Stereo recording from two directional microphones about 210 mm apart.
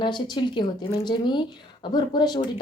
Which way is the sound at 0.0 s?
20° left (ahead or behind).